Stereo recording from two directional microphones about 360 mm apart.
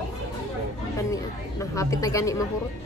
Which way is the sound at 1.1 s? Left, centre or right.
Centre.